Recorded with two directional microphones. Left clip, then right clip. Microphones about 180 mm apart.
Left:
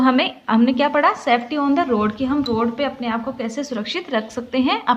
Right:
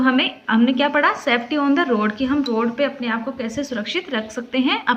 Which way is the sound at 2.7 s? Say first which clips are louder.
Right 1 dB; 35° left (ahead or behind).